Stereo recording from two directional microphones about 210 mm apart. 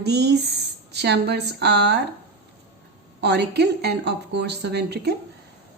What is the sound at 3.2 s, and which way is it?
Speech, 50° right (ahead or behind).